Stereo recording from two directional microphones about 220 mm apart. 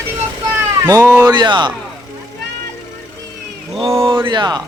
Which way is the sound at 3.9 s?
15° right (ahead or behind).